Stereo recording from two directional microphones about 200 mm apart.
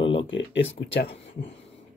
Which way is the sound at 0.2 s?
70° left (ahead or behind).